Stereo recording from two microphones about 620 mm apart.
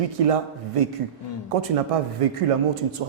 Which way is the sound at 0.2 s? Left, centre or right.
Right.